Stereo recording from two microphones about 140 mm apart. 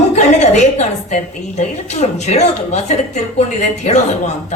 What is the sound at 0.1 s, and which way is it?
A woman's voice, 55° left (ahead or behind).